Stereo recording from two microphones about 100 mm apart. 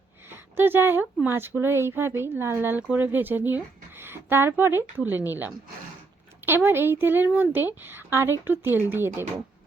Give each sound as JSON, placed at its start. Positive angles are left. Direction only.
{"t": 0.3, "sound": "a woman's voice", "side_deg": -20}